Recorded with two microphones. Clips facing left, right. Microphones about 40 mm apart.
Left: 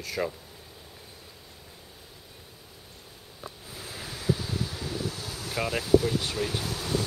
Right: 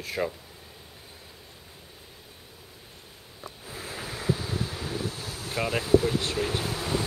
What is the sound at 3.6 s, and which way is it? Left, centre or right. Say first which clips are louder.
Waves: right 5 dB; right.